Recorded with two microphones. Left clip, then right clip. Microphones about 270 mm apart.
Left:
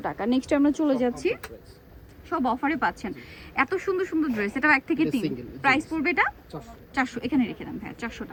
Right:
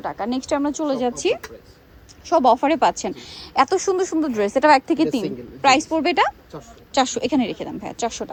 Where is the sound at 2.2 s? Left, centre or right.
Centre.